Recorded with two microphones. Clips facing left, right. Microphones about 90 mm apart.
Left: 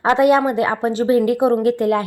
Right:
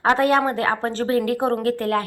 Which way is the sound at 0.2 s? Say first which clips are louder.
Left 4 dB; 15° left (ahead or behind).